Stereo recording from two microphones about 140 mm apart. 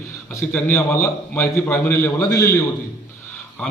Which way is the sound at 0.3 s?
20° left (ahead or behind).